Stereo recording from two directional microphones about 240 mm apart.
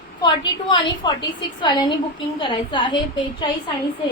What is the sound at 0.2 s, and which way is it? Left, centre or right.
A woman's voice, centre.